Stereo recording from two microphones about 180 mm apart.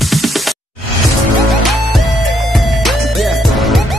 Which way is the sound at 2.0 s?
Centre (ahead or behind).